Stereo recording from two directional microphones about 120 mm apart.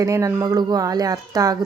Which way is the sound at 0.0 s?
25° right (ahead or behind).